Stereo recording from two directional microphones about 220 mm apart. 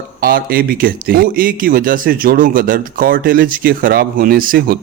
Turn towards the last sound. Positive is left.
turn(degrees=-40)  # may be behind; listen again after turning